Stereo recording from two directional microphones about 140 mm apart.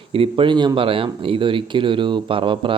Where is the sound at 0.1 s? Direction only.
40° right (ahead or behind).